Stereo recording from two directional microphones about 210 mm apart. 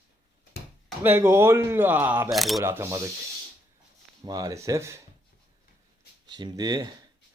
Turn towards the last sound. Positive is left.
turn(degrees=-20)  # may be behind; listen again after turning